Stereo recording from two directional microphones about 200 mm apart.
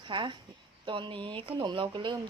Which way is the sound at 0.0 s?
25° right (ahead or behind).